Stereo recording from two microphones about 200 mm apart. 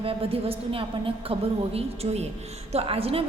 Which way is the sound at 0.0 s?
30° right (ahead or behind).